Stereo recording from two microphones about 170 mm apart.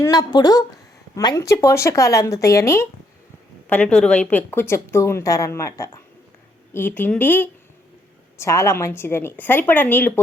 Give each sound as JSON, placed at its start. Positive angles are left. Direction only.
{"t": 0.0, "sound": "a woman's voice", "side_deg": 25}
{"t": 3.7, "sound": "a woman's voice", "side_deg": 5}